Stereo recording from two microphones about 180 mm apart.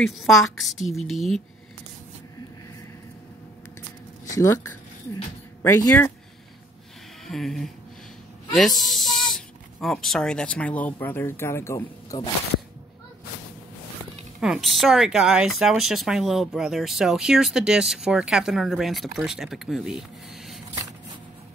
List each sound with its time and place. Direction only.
0.0 s speech: centre (ahead or behind)
4.4 s speech: 15° left (ahead or behind)
7.2 s speech: centre (ahead or behind)
14.4 s speech: centre (ahead or behind)